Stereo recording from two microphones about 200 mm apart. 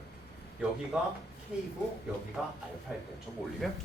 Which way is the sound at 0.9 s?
5° right (ahead or behind).